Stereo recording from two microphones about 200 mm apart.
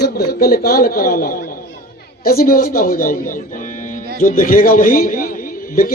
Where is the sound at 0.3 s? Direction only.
50° left (ahead or behind).